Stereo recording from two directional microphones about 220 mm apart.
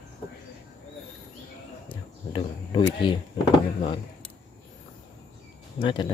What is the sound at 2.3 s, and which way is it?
Speech, 25° left (ahead or behind).